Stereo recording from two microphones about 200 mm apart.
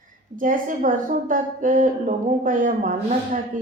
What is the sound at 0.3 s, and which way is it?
A woman's voice, 40° right (ahead or behind).